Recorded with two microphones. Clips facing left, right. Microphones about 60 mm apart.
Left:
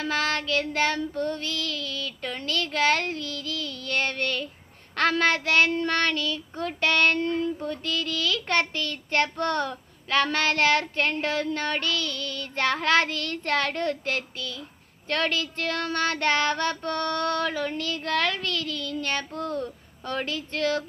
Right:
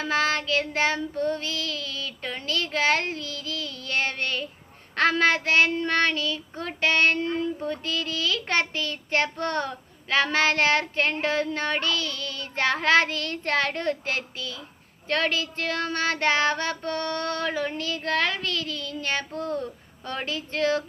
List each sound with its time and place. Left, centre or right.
0.0 s child singing: right
2.5 s a sound: right
3.2 s music: right
3.8 s child singing: right